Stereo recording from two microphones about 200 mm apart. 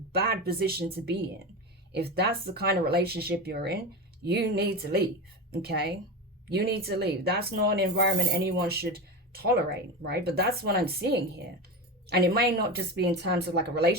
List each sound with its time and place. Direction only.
0.1 s speech: 55° right (ahead or behind)
1.9 s speech: 55° right (ahead or behind)